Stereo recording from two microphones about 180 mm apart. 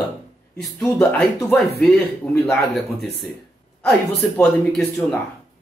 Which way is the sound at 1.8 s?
Centre (ahead or behind).